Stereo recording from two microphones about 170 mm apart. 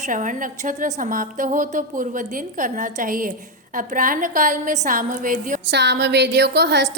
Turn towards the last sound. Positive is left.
turn(degrees=-90)